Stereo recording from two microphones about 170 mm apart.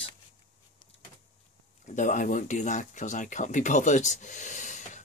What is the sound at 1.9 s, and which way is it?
Speech, 50° left (ahead or behind).